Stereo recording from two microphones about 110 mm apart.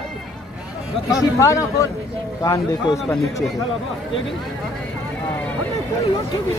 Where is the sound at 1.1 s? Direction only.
30° left (ahead or behind).